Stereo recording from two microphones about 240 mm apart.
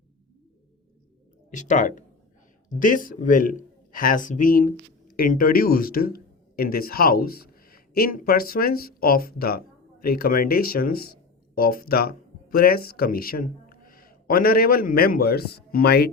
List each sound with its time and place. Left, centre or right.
1.5 s speech: left